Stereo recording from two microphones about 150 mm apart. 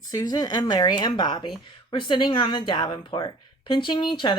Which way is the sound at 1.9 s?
30° left (ahead or behind).